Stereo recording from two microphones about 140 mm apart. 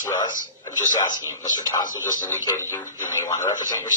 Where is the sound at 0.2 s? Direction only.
30° left (ahead or behind).